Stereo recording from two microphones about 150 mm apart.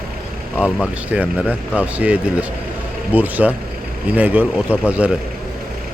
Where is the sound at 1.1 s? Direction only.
10° right (ahead or behind).